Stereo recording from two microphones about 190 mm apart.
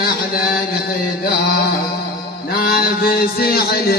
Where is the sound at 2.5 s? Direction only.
50° left (ahead or behind).